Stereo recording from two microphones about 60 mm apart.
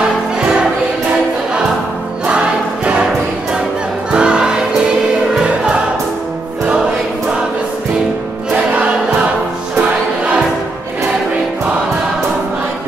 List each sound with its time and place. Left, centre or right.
2.2 s choir: centre
4.1 s choir: centre
8.5 s choir: centre
9.8 s music: right